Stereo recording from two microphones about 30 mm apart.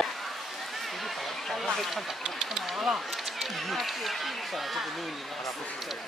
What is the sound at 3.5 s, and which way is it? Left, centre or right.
Speech, centre.